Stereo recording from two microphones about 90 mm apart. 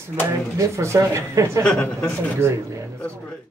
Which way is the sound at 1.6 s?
10° left (ahead or behind).